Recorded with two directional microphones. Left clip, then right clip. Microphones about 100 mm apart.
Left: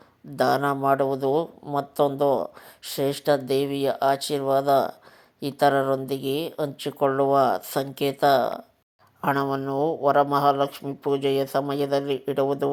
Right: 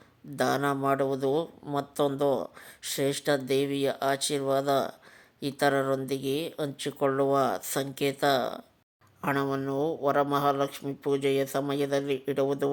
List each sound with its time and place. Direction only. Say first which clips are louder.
0.3 s speech: left 5 dB; 10° left (ahead or behind)